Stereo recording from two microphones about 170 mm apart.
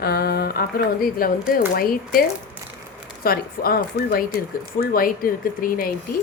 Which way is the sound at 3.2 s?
60° left (ahead or behind).